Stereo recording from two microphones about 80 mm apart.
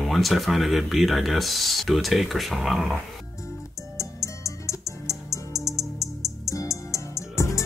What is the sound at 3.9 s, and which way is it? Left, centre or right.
Music, left.